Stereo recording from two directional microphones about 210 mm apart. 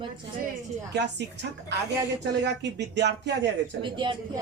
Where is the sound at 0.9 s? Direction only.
55° right (ahead or behind).